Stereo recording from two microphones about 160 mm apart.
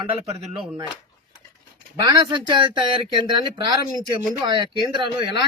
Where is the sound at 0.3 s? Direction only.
35° right (ahead or behind).